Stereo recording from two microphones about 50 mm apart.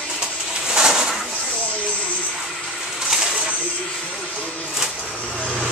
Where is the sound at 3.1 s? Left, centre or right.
Centre.